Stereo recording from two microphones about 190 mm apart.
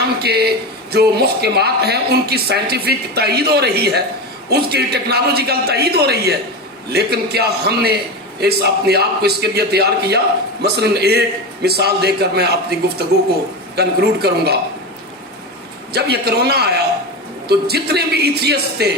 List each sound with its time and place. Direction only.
0.2 s a man's voice: 55° right (ahead or behind)
13.7 s speech: 60° right (ahead or behind)
15.9 s speech: 60° right (ahead or behind)